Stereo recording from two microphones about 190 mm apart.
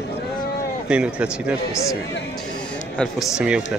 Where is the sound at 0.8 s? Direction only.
5° right (ahead or behind).